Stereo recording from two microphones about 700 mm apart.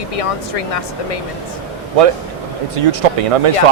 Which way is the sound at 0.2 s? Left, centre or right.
Left.